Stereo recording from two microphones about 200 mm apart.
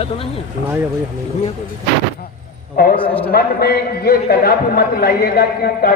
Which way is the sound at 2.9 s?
25° left (ahead or behind).